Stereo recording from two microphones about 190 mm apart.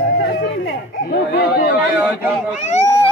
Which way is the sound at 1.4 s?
55° left (ahead or behind).